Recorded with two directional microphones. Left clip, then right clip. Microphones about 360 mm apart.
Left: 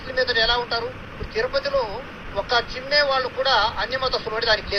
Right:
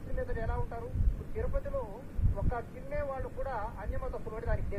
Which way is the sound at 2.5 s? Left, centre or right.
Centre.